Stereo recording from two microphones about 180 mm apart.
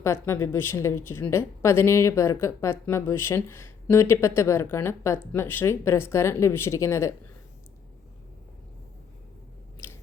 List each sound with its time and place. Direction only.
0.0 s a woman's voice: 15° left (ahead or behind)
9.8 s biting: 10° left (ahead or behind)